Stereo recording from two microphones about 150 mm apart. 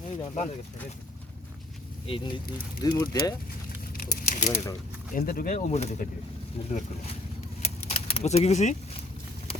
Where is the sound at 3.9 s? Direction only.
65° left (ahead or behind).